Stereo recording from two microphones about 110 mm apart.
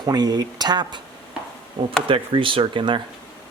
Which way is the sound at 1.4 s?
10° right (ahead or behind).